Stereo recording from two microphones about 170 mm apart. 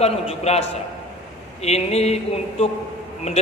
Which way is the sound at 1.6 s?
40° left (ahead or behind).